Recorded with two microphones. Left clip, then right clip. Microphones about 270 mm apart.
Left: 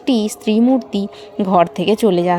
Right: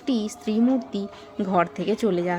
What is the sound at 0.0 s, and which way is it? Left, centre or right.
A woman's voice, left.